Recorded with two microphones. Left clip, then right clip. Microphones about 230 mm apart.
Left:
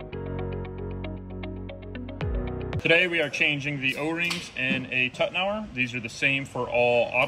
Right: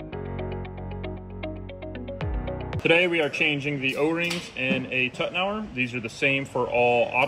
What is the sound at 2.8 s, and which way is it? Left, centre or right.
Speech, centre.